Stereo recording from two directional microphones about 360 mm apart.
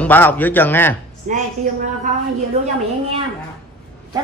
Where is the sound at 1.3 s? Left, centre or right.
Right.